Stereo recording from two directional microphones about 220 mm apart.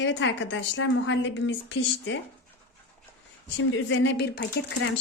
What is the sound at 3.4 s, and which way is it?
A woman's voice, 55° left (ahead or behind).